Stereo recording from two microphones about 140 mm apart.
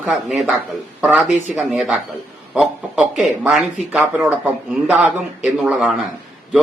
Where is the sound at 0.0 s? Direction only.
5° right (ahead or behind).